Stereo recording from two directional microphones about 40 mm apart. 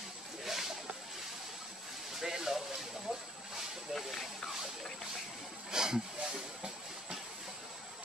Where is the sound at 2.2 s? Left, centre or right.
Centre.